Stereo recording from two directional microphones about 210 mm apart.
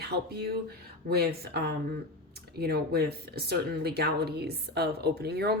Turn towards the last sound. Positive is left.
turn(degrees=-50)  # may be behind; listen again after turning